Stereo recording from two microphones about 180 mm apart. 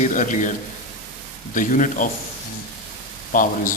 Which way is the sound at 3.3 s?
50° left (ahead or behind).